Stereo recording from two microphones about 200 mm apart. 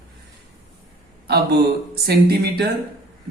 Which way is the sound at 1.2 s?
55° right (ahead or behind).